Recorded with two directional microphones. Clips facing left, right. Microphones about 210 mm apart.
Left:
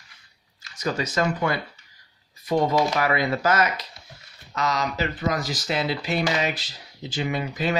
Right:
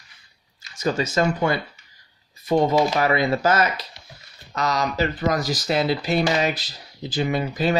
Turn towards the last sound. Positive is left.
turn(degrees=-35)  # may be behind; listen again after turning